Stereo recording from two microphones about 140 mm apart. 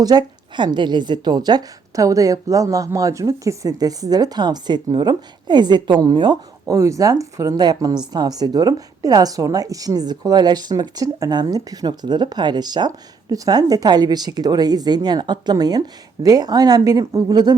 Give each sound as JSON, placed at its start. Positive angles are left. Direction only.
{"t": 0.0, "sound": "a woman's voice", "side_deg": -30}